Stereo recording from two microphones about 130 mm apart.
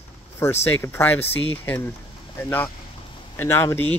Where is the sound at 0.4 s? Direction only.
15° left (ahead or behind).